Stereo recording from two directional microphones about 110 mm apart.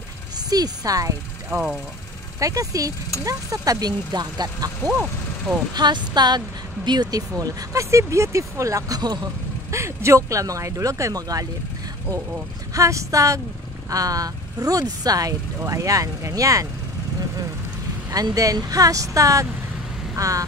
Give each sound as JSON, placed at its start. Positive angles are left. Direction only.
{"t": 0.5, "sound": "speech", "side_deg": -35}
{"t": 1.5, "sound": "speech", "side_deg": -5}
{"t": 2.4, "sound": "speech", "side_deg": -30}
{"t": 12.7, "sound": "speech", "side_deg": -30}
{"t": 18.1, "sound": "speech", "side_deg": -35}